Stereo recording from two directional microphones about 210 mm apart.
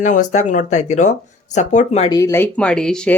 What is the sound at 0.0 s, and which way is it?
Speech, 35° left (ahead or behind).